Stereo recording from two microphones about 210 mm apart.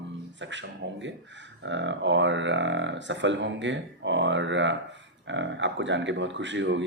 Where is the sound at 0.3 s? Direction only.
60° right (ahead or behind).